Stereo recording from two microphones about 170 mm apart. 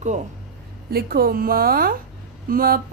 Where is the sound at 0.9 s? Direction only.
65° right (ahead or behind).